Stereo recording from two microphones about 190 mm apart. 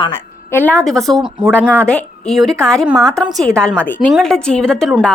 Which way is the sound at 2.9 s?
15° right (ahead or behind).